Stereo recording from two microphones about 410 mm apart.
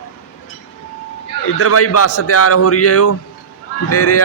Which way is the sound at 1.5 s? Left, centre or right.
Left.